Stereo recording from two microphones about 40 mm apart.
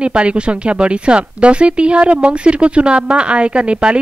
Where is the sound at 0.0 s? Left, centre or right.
Right.